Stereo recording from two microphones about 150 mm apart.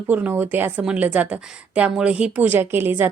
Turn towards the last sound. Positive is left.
turn(degrees=-15)  # may be behind; listen again after turning